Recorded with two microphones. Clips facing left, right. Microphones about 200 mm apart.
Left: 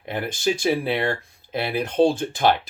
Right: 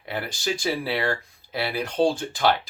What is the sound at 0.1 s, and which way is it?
Speech, 20° left (ahead or behind).